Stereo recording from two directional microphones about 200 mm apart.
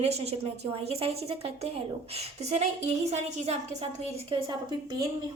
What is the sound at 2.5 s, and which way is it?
A woman's voice, 35° right (ahead or behind).